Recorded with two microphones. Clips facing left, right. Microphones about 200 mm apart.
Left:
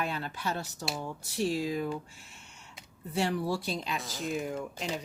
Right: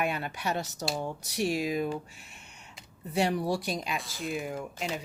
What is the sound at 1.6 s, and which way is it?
Speech, 15° right (ahead or behind).